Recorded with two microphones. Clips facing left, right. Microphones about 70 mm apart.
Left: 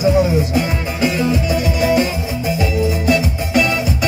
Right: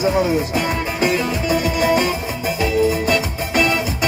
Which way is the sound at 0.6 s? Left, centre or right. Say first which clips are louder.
Left 1 dB; right.